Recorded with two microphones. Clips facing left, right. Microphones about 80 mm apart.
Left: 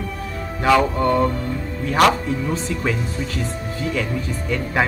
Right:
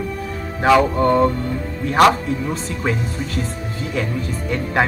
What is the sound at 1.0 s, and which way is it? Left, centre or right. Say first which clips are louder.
Music: right 3 dB; right.